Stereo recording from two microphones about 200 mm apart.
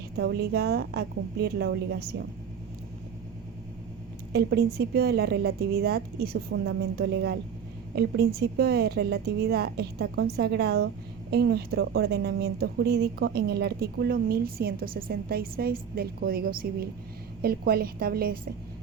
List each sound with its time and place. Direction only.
0.2 s a woman's voice: 55° right (ahead or behind)
4.3 s speech: 55° right (ahead or behind)